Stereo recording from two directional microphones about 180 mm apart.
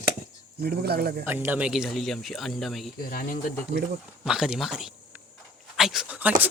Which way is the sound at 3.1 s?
50° left (ahead or behind).